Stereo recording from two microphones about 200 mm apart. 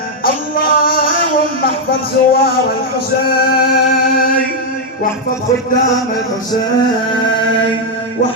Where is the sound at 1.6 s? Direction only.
50° left (ahead or behind).